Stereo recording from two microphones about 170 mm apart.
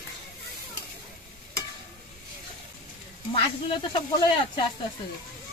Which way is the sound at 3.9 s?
25° left (ahead or behind).